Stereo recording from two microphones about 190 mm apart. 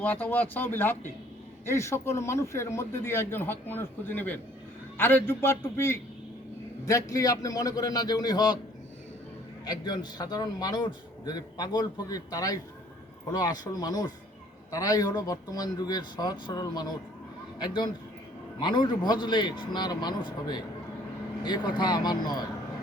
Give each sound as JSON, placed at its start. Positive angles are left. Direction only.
{"t": 0.0, "sound": "a man's voice", "side_deg": 10}
{"t": 9.6, "sound": "a man's voice", "side_deg": 20}
{"t": 18.6, "sound": "a man's voice", "side_deg": 25}